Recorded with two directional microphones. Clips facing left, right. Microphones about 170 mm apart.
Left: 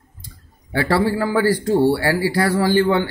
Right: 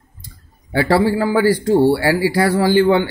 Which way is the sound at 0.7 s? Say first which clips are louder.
Right 3 dB; 25° right (ahead or behind).